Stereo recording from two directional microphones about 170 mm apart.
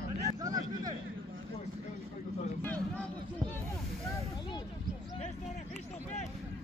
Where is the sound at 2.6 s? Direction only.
10° left (ahead or behind).